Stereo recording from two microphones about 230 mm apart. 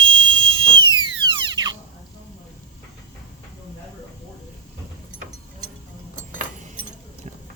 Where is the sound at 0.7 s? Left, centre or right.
Right.